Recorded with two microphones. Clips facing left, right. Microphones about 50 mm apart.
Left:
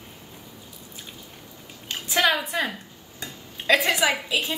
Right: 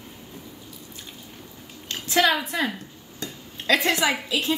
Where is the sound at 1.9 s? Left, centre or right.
Centre.